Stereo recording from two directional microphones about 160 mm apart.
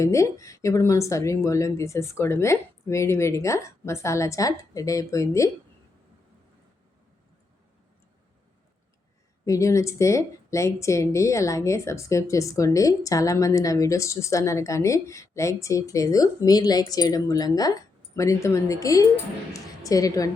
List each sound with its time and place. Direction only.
0.0 s a woman's voice: 20° left (ahead or behind)
9.5 s a woman's voice: 20° left (ahead or behind)